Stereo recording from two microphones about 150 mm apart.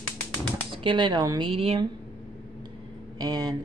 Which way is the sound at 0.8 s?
30° right (ahead or behind).